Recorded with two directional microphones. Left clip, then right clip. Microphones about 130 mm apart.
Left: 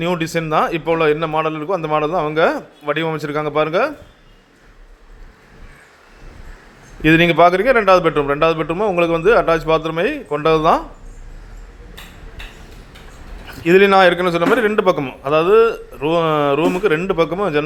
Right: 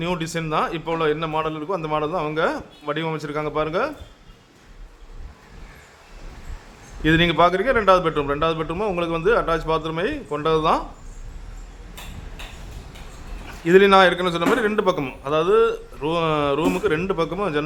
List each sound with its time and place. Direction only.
0.0 s a man's voice: 25° left (ahead or behind)
7.0 s a man's voice: 25° left (ahead or behind)
13.7 s a man's voice: 20° left (ahead or behind)